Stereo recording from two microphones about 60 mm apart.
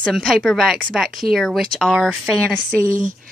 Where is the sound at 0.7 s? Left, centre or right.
Right.